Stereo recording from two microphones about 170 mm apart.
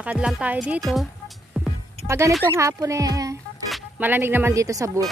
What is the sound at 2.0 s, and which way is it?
Speech, 15° right (ahead or behind).